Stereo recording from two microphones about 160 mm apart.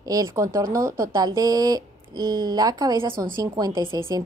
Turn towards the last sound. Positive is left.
turn(degrees=-30)  # may be behind; listen again after turning